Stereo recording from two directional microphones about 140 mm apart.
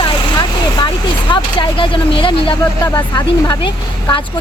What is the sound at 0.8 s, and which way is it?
Speech, 35° left (ahead or behind).